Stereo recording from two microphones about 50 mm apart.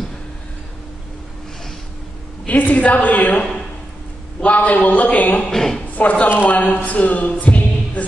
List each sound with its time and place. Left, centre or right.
2.4 s a man's voice: left
5.5 s a woman's voice: centre
5.9 s speech: left